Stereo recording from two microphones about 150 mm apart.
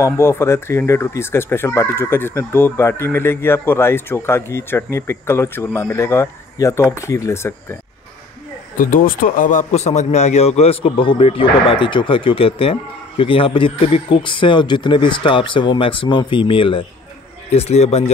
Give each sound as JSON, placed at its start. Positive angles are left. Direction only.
{"t": 0.0, "sound": "speech", "side_deg": 20}
{"t": 8.7, "sound": "a man's voice", "side_deg": 65}